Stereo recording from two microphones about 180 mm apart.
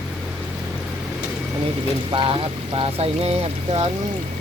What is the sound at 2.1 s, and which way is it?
Speech, 30° right (ahead or behind).